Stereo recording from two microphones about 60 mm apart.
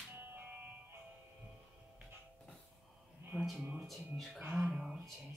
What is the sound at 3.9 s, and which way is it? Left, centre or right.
Speech, centre.